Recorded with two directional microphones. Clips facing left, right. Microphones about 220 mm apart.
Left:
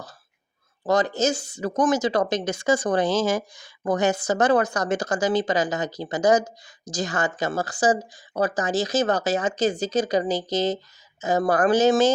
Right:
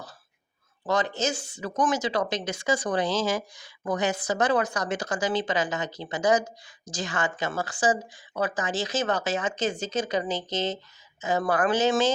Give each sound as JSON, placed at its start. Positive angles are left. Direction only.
{"t": 0.9, "sound": "speech", "side_deg": 40}